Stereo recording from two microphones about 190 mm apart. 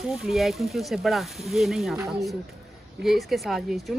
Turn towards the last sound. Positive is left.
turn(degrees=0)  # may be behind; listen again after turning